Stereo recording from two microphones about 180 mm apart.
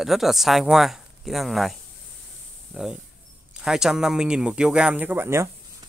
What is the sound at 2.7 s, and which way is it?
Speech, 5° right (ahead or behind).